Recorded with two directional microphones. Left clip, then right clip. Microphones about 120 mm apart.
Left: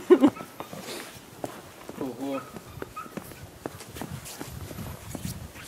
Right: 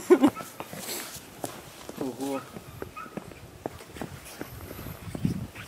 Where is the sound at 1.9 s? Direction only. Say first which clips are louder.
Even; 25° right (ahead or behind).